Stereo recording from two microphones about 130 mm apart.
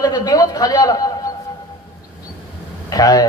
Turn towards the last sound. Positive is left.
turn(degrees=30)  # may be behind; listen again after turning